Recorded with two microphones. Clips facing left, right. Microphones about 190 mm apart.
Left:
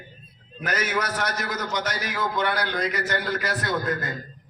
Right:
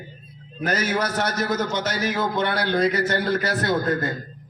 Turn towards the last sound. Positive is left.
turn(degrees=-30)  # may be behind; listen again after turning